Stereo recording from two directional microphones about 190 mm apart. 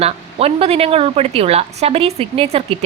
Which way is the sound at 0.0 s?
30° right (ahead or behind).